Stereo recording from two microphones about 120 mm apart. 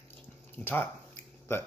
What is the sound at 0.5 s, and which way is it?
Speech, 15° left (ahead or behind).